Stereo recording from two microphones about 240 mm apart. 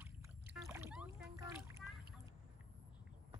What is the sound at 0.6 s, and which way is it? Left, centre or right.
Rowboat, centre.